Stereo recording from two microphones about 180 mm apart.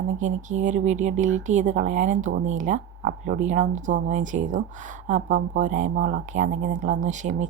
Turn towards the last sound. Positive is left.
turn(degrees=-40)  # may be behind; listen again after turning